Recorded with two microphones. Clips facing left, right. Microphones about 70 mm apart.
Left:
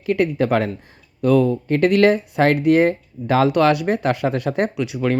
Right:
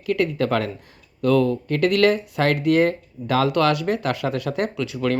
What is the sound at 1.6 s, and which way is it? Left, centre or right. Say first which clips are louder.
Speech: left 3 dB; left.